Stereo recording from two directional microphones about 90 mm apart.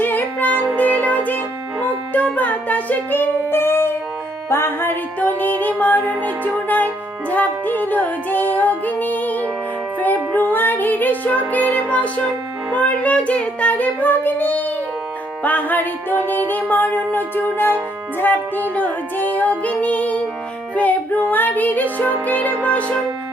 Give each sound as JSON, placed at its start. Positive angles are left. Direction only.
{"t": 0.0, "sound": "music", "side_deg": 20}
{"t": 11.5, "sound": "child singing", "side_deg": 20}
{"t": 15.4, "sound": "music", "side_deg": 20}
{"t": 18.7, "sound": "child singing", "side_deg": 20}
{"t": 20.7, "sound": "music", "side_deg": 20}
{"t": 22.3, "sound": "child singing", "side_deg": 15}